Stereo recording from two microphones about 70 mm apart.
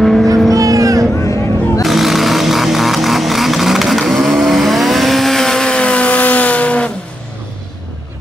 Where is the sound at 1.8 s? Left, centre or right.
Centre.